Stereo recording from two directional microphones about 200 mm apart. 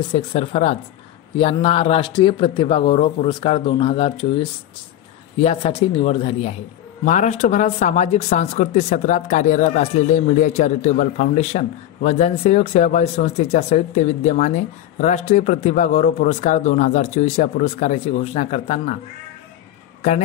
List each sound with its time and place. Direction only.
0.1 s speech: 30° left (ahead or behind)